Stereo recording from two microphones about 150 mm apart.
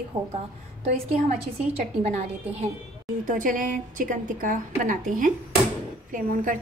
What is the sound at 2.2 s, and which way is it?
Speech, 45° right (ahead or behind).